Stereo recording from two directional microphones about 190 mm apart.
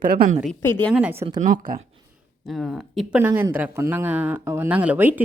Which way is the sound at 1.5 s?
50° right (ahead or behind).